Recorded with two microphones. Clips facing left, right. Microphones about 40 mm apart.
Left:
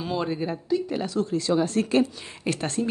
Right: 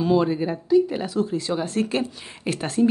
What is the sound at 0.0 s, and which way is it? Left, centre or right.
A woman's voice, centre.